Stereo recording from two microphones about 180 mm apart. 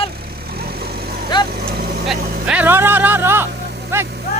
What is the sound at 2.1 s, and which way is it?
Vehicle, 5° right (ahead or behind).